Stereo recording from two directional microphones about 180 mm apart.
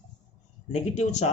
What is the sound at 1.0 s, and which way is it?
Speech, 40° left (ahead or behind).